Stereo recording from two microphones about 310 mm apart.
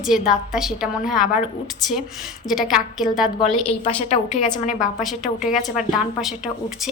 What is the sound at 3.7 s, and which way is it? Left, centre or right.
A woman's voice, left.